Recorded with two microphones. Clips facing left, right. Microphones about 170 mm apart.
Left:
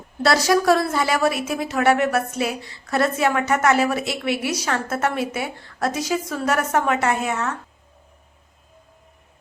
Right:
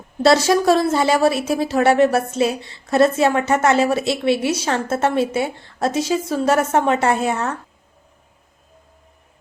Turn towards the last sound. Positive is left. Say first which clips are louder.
# right 3 dB
turn(degrees=-35)  # may be behind; listen again after turning